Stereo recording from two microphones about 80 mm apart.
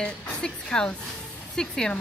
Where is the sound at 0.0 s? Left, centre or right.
Centre.